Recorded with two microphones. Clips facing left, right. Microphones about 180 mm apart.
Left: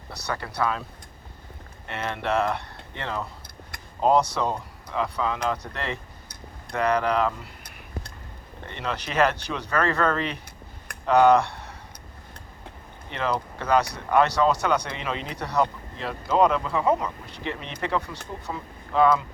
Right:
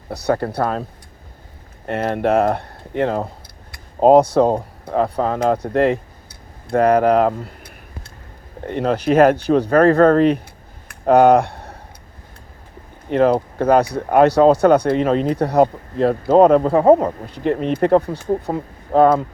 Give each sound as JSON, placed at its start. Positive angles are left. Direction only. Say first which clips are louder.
{"t": 0.3, "sound": "speech", "louder": "right 8 dB", "side_deg": -55}
{"t": 1.9, "sound": "speech", "louder": "right 10 dB", "side_deg": -45}
{"t": 8.6, "sound": "speech", "louder": "right 13 dB", "side_deg": -45}
{"t": 11.0, "sound": "a sound", "louder": "right 6 dB", "side_deg": -50}
{"t": 13.1, "sound": "speech", "louder": "right 12 dB", "side_deg": -50}